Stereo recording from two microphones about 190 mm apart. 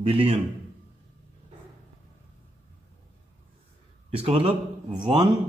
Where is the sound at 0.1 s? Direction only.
30° right (ahead or behind).